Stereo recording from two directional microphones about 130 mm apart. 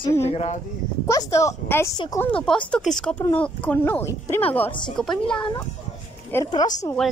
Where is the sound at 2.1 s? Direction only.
10° left (ahead or behind).